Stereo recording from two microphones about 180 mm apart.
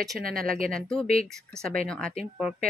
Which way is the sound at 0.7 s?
5° left (ahead or behind).